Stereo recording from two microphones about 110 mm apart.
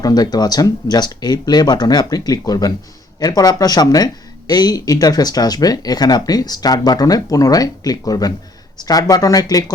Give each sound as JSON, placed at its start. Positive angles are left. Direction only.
{"t": 0.0, "sound": "speech", "side_deg": 35}